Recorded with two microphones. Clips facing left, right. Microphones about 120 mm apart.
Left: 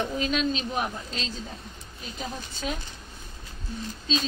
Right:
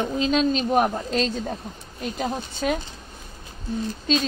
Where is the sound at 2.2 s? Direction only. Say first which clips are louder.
Right 7 dB; 70° right (ahead or behind).